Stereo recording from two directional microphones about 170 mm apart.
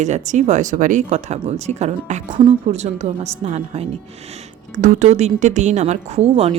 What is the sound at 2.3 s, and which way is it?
Speech, 30° right (ahead or behind).